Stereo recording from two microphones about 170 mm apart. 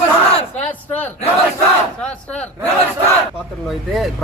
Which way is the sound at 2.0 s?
5° left (ahead or behind).